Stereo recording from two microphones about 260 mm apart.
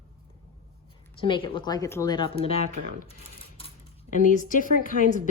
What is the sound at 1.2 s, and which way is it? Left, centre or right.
Speech, centre.